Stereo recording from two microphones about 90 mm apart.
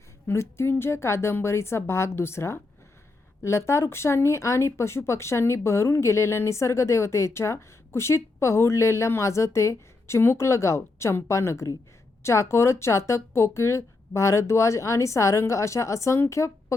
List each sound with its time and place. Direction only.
0.3 s a woman's voice: 30° left (ahead or behind)